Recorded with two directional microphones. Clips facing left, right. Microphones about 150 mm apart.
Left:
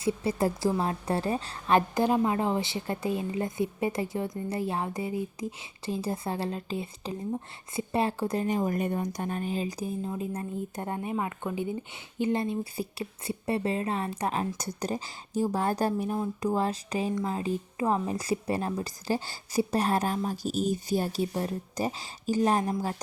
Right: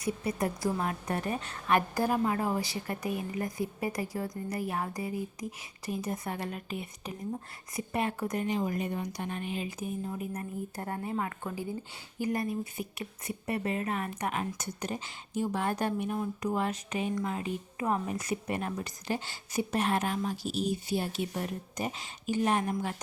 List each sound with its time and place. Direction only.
0.0 s a woman's voice: 30° left (ahead or behind)
8.4 s a woman's voice: 45° left (ahead or behind)